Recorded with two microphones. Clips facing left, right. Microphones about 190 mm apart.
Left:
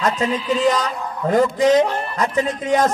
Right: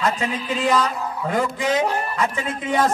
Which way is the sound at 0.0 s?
40° left (ahead or behind).